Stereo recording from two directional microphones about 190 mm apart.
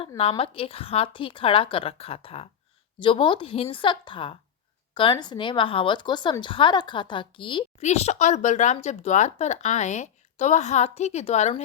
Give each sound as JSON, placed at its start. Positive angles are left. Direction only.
{"t": 0.2, "sound": "a woman's voice", "side_deg": 30}